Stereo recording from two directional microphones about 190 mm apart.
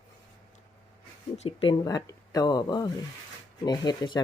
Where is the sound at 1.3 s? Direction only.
30° left (ahead or behind).